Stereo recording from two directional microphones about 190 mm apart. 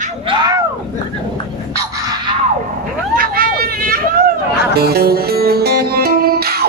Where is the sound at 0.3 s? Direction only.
20° right (ahead or behind).